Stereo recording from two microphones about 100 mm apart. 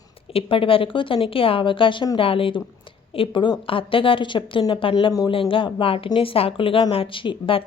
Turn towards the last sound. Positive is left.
turn(degrees=60)  # may be behind; listen again after turning